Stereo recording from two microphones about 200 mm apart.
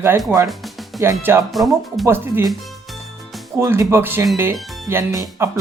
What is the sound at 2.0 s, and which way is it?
Speech, 10° right (ahead or behind).